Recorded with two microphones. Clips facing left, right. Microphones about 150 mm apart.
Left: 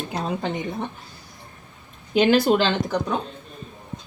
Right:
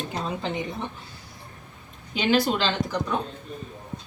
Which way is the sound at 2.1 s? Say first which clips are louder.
Left 5 dB; 45° left (ahead or behind).